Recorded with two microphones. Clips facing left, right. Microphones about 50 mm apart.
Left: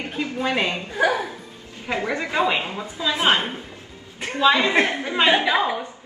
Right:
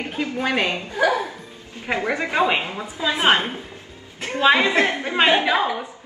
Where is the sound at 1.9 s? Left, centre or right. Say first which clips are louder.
Right 2 dB; right.